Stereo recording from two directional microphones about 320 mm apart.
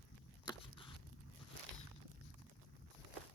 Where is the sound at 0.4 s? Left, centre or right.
Centre.